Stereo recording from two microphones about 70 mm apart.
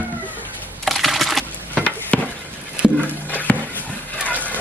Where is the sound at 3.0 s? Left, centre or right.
Left.